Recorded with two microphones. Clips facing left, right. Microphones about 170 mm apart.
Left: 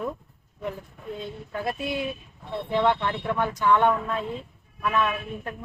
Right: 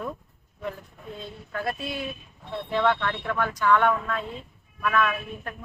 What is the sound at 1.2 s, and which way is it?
A man's voice, 20° left (ahead or behind).